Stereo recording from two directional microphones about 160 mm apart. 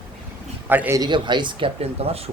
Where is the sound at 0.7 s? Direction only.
15° right (ahead or behind); by 2.3 s 35° right (ahead or behind).